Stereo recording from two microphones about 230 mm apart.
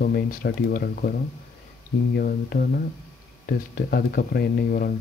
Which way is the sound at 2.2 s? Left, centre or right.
Left.